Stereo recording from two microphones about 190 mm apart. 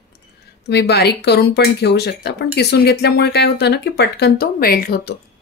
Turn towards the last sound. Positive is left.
turn(degrees=55)  # may be behind; listen again after turning